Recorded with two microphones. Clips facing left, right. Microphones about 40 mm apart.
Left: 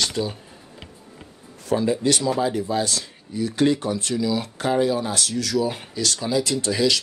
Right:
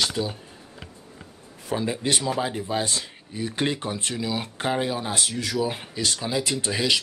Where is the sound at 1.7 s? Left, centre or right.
Right.